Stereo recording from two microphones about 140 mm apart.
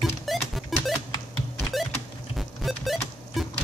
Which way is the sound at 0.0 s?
Centre (ahead or behind).